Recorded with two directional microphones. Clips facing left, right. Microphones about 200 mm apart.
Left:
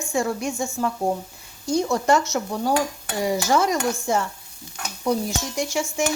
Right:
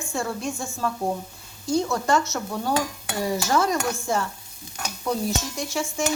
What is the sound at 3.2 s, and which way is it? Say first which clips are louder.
Speech: left 2 dB; 15° left (ahead or behind).